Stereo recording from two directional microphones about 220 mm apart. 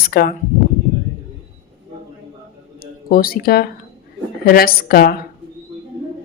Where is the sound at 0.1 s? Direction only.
45° left (ahead or behind).